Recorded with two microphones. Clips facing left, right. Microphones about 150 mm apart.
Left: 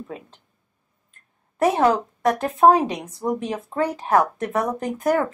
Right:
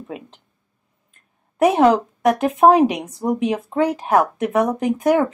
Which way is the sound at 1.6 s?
15° right (ahead or behind).